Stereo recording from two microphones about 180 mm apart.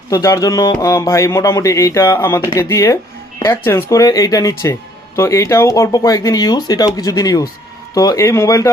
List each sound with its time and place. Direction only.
0.1 s speech: 20° left (ahead or behind)